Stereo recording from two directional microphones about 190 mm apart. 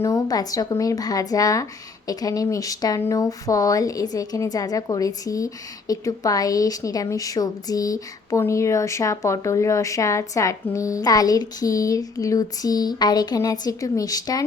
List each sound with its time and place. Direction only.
0.0 s a woman's voice: 20° left (ahead or behind)